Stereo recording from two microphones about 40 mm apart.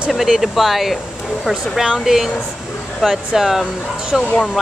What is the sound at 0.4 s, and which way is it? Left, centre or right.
Speech, centre.